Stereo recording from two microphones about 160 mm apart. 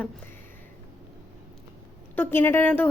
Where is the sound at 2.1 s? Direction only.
15° left (ahead or behind).